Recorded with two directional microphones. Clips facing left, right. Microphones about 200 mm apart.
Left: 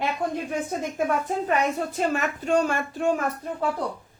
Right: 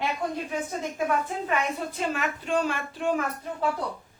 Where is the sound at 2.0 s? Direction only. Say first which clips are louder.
Left 4 dB; 45° left (ahead or behind).